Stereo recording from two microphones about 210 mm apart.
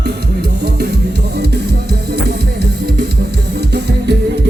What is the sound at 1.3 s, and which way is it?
Music, 50° right (ahead or behind).